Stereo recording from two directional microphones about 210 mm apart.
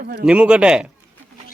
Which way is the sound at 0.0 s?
45° right (ahead or behind).